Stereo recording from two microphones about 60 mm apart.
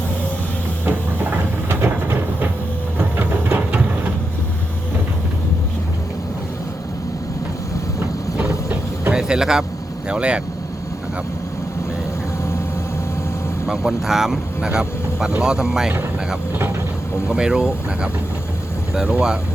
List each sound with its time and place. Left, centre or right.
0.9 s train: right
3.0 s a sound: right
8.4 s vehicle: right
9.1 s vehicle: centre
10.1 s speech: centre
13.7 s speech: centre
17.2 s speech: centre